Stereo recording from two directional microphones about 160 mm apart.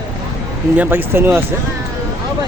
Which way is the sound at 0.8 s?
15° right (ahead or behind).